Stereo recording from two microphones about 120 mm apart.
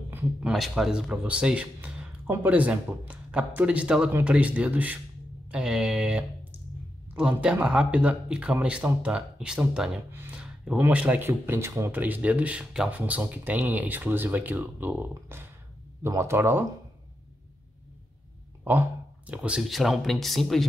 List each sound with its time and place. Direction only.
0.5 s speech: 5° right (ahead or behind); by 16.6 s 20° right (ahead or behind)
18.6 s speech: 15° right (ahead or behind); by 20.6 s centre (ahead or behind)